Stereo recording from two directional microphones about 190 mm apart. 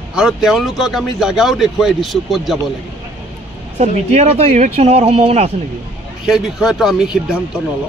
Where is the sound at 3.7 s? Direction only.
35° right (ahead or behind).